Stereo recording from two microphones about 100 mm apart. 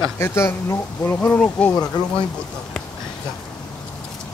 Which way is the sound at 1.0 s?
15° left (ahead or behind).